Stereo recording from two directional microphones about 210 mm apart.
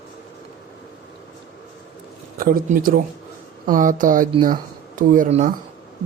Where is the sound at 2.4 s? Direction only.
45° right (ahead or behind).